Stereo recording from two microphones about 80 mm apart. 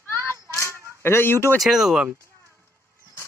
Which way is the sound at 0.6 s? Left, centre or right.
Right.